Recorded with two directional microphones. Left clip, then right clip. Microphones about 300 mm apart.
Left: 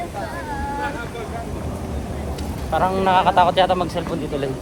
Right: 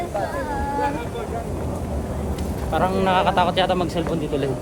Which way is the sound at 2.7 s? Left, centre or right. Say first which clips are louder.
Left 2 dB; centre.